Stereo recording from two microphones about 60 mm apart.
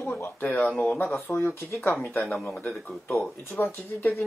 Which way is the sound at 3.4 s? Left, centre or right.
Left.